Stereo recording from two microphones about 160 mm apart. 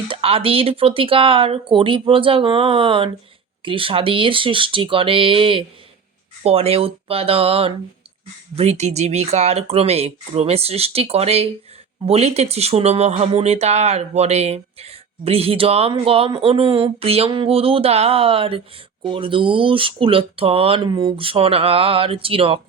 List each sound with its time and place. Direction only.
0.1 s speech: 35° right (ahead or behind)